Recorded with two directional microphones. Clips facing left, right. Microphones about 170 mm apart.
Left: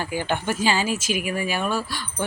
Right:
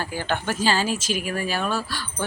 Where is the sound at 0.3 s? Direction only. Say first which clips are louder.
Right 1 dB; 10° left (ahead or behind).